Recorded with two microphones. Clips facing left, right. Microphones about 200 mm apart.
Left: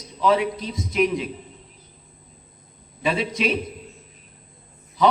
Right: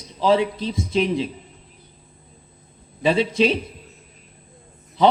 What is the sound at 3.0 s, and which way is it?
Speech, 30° right (ahead or behind).